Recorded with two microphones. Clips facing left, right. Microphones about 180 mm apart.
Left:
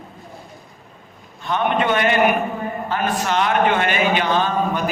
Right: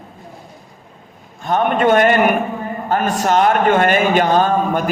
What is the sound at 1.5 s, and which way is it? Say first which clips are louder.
A man's voice: right 5 dB; 45° right (ahead or behind).